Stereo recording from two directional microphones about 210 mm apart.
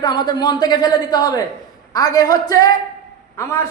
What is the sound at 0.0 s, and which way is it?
A man's voice, 20° left (ahead or behind).